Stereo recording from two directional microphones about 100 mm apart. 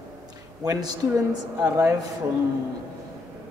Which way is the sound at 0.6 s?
35° right (ahead or behind).